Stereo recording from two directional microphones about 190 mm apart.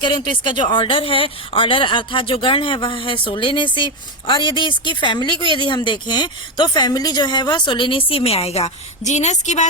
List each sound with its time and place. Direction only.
0.0 s speech: 25° left (ahead or behind)